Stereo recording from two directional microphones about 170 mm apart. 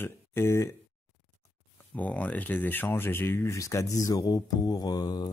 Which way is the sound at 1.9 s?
10° left (ahead or behind).